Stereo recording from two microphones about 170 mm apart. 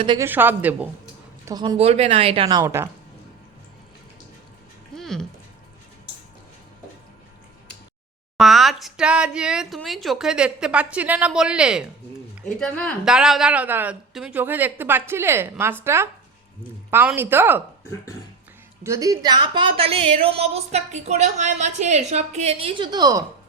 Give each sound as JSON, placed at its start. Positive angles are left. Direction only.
{"t": 0.2, "sound": "a woman's voice", "side_deg": -10}
{"t": 1.5, "sound": "speech", "side_deg": -25}
{"t": 1.8, "sound": "a woman's voice", "side_deg": -35}
{"t": 4.9, "sound": "music", "side_deg": 5}
{"t": 8.4, "sound": "speech", "side_deg": 0}
{"t": 12.5, "sound": "a woman's voice", "side_deg": 5}
{"t": 18.8, "sound": "a woman's voice", "side_deg": -20}